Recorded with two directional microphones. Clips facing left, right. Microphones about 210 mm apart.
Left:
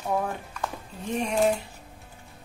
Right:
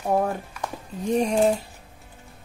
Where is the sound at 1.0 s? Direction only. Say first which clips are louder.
Right 7 dB; 35° right (ahead or behind).